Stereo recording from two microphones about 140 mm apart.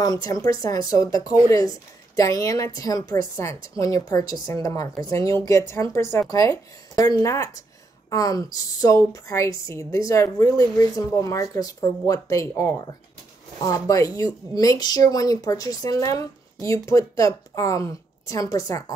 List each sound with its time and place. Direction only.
0.0 s speech: 25° left (ahead or behind)